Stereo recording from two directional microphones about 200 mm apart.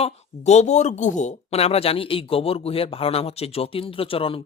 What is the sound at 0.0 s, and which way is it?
Speech, 35° left (ahead or behind).